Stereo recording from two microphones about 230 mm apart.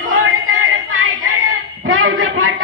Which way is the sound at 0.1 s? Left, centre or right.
Right.